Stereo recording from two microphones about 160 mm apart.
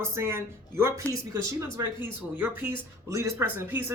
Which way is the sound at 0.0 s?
15° right (ahead or behind).